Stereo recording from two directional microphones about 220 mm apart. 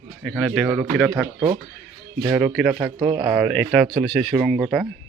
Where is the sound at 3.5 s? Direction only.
Centre (ahead or behind).